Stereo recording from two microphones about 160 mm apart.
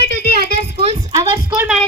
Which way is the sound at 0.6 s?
40° right (ahead or behind).